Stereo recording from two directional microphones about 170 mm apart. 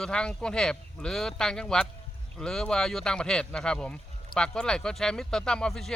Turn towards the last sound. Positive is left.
turn(degrees=0)  # may be behind; listen again after turning